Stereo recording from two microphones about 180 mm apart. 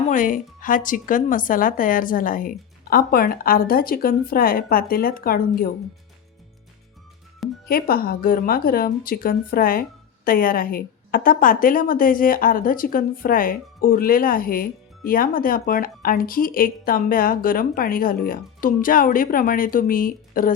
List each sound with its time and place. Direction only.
0.1 s a woman's voice: 45° left (ahead or behind)
7.7 s a woman's voice: 55° left (ahead or behind)